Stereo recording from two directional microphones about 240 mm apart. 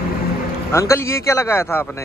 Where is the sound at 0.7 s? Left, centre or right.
Centre.